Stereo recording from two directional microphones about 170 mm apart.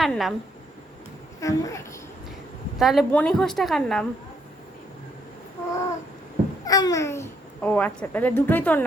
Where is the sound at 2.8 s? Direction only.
Centre (ahead or behind).